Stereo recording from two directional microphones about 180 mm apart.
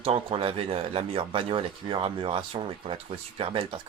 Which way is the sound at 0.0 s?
30° right (ahead or behind).